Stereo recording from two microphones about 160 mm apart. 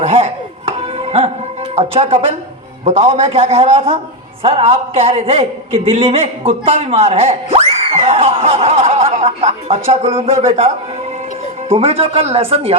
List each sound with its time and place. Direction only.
0.0 s chopping: 40° right (ahead or behind)
0.8 s music: 40° right (ahead or behind)
1.7 s a man's voice: 40° right (ahead or behind)
11.7 s a man's voice: 35° right (ahead or behind)